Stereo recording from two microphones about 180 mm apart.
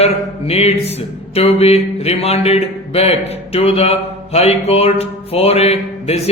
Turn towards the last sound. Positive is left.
turn(degrees=35)  # may be behind; listen again after turning